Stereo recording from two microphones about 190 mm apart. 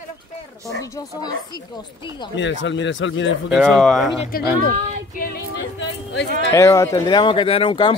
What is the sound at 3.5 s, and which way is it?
Speech, centre (ahead or behind).